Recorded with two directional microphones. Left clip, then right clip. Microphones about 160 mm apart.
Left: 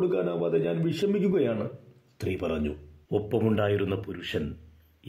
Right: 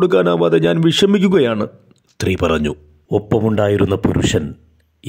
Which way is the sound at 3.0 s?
40° right (ahead or behind).